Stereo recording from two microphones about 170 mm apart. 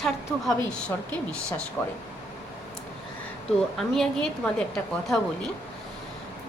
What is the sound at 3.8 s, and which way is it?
A woman's voice, 5° left (ahead or behind).